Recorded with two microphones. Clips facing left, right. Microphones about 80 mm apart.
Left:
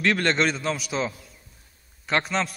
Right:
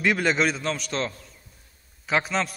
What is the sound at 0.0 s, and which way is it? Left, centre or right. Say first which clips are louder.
A man's voice: even; centre.